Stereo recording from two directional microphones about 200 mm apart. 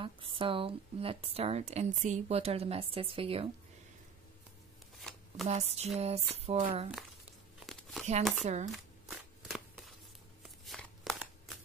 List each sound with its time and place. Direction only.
0.0 s speech: 25° right (ahead or behind)
4.9 s shuffling cards: centre (ahead or behind)
5.5 s speech: 30° right (ahead or behind)
7.6 s crumpling: centre (ahead or behind)
8.2 s speech: centre (ahead or behind)
8.7 s shuffling cards: centre (ahead or behind)
10.6 s a sound: centre (ahead or behind)